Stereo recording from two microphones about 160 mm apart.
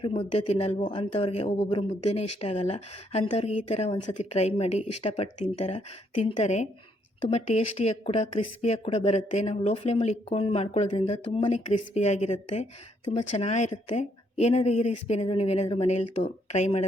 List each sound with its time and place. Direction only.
0.0 s speech: 35° left (ahead or behind)